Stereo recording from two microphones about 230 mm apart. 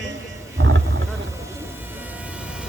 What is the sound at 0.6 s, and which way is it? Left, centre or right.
Roaring cats, right.